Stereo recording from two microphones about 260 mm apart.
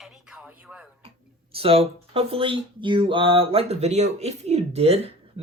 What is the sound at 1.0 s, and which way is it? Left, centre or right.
Speech, right.